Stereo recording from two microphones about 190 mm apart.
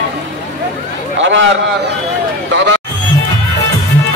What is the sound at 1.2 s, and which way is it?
Speech, 75° right (ahead or behind).